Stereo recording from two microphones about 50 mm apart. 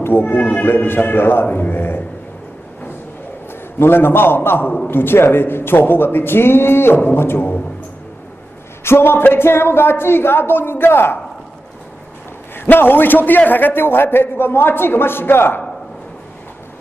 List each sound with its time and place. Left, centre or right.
0.0 s a man's voice: left
3.8 s a man's voice: left
8.8 s a man's voice: left
12.6 s a man's voice: left